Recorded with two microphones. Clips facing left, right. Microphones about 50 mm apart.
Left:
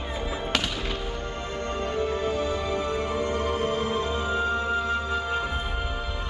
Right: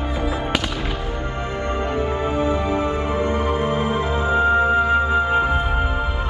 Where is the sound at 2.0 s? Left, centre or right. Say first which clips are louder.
Right 3 dB; right.